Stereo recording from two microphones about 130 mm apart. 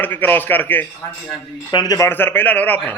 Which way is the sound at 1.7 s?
30° left (ahead or behind).